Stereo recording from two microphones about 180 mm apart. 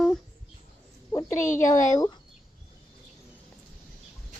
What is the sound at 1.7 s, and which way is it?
Speech, 45° left (ahead or behind).